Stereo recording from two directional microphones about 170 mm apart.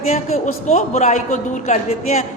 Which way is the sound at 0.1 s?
40° left (ahead or behind).